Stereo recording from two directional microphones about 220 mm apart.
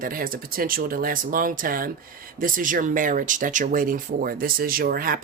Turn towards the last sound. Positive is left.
turn(degrees=-40)  # may be behind; listen again after turning